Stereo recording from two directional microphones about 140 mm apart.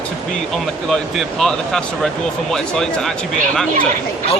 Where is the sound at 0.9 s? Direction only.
5° left (ahead or behind).